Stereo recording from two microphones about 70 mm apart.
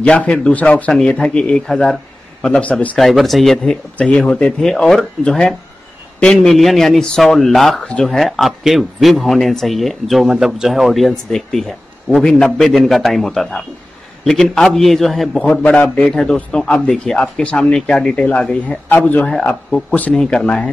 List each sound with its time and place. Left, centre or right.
0.0 s speech: centre
2.5 s speech: left
3.0 s speech: centre
4.0 s speech: centre
15.3 s speech: centre
18.9 s speech: left
19.2 s speech: centre